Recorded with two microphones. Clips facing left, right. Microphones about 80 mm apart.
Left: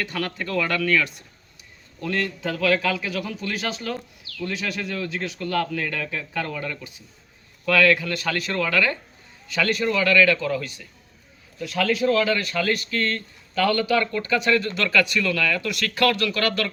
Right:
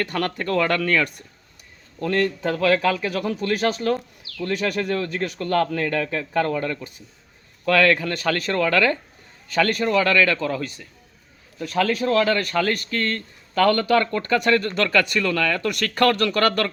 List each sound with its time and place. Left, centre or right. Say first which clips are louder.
0.0 s speech: right 4 dB; right